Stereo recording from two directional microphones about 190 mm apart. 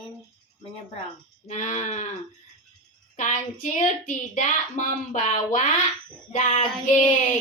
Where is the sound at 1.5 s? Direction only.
40° left (ahead or behind).